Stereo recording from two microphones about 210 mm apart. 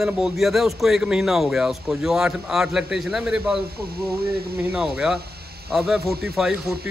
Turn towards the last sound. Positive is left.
turn(degrees=-5)  # may be behind; listen again after turning